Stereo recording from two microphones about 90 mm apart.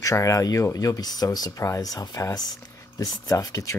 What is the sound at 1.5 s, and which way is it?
Speech, 35° left (ahead or behind).